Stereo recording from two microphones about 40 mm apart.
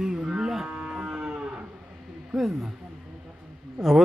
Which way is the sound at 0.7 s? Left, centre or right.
Right.